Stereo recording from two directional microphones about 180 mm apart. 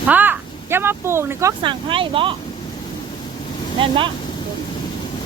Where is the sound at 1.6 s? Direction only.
30° right (ahead or behind).